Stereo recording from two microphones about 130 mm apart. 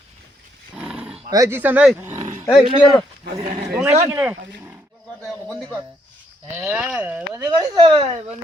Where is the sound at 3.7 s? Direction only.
10° right (ahead or behind).